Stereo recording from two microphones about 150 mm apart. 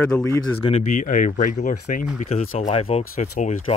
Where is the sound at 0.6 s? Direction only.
45° left (ahead or behind).